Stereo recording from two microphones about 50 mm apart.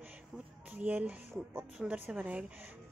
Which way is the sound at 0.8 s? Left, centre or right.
Right.